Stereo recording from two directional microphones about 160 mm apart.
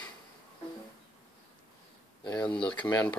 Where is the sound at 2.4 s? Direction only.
30° left (ahead or behind).